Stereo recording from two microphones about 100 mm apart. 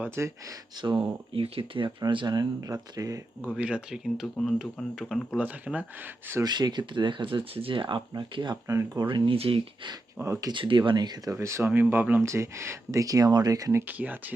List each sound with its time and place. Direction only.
0.2 s speech: 25° right (ahead or behind)
0.8 s speech: 55° right (ahead or behind)
1.3 s speech: 70° right (ahead or behind)
2.0 s speech: 45° right (ahead or behind)
3.6 s speech: 10° right (ahead or behind)
5.4 s speech: 15° right (ahead or behind)
6.4 s speech: 45° right (ahead or behind)
8.6 s speech: 30° right (ahead or behind)
9.0 s speech: 55° right (ahead or behind)
10.2 s speech: 20° right (ahead or behind)
10.5 s speech: 55° right (ahead or behind)
11.3 s speech: 25° right (ahead or behind)
12.2 s speech: 30° right (ahead or behind)
13.8 s speech: 15° right (ahead or behind)